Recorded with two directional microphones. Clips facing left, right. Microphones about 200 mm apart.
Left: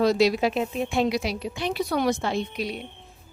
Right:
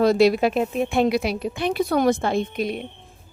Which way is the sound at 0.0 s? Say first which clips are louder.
Right 4 dB; 55° right (ahead or behind).